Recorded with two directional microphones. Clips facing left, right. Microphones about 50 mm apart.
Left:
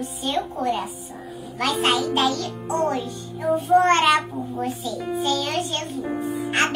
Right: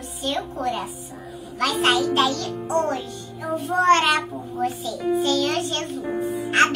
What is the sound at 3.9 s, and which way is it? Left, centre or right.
A child's voice, centre.